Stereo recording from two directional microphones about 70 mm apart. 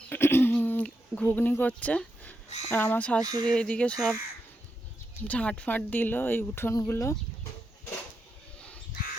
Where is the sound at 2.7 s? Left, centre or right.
Left.